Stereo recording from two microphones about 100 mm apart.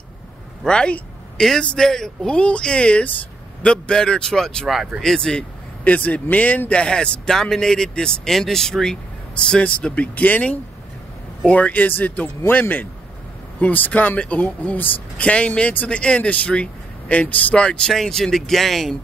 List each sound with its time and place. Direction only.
0.7 s speech: 10° left (ahead or behind)